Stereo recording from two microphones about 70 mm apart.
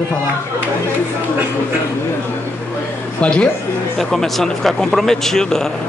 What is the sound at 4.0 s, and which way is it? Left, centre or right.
Speech, centre.